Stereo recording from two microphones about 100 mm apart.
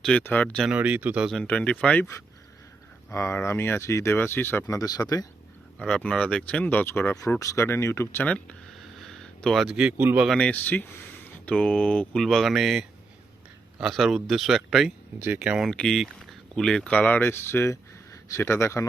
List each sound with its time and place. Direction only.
0.2 s speech: 15° left (ahead or behind)
0.7 s speech: 15° right (ahead or behind)
1.3 s speech: 10° left (ahead or behind)
3.1 s speech: 25° left (ahead or behind)
4.6 s speech: 35° left (ahead or behind)
5.8 s speech: 10° left (ahead or behind); by 8.3 s 25° left (ahead or behind)
8.8 s a sound: 5° left (ahead or behind)
9.6 s speech: 10° right (ahead or behind)
10.0 s speech: 20° right (ahead or behind)
10.2 s a man's voice: 10° left (ahead or behind); by 15.7 s 5° right (ahead or behind)
15.7 s speech: 10° left (ahead or behind); by 18.9 s 30° left (ahead or behind)